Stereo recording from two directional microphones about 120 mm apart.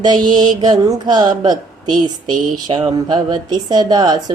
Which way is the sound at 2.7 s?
40° right (ahead or behind).